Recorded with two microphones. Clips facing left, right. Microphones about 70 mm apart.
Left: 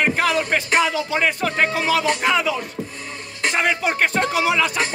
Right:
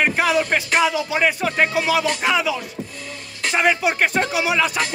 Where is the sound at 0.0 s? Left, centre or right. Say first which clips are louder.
Right 1 dB; centre.